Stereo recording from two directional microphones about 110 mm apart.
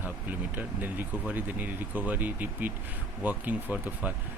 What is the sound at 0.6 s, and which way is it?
Speech, 15° right (ahead or behind).